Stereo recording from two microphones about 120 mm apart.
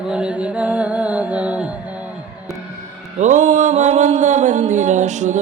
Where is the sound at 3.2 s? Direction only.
90° right.